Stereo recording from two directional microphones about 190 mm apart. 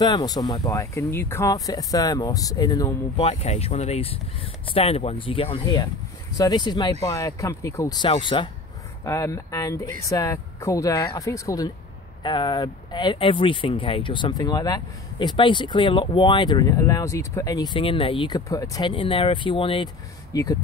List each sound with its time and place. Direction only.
0.0 s speech: 20° left (ahead or behind)
3.2 s speech: 35° left (ahead or behind); by 20.5 s 20° left (ahead or behind)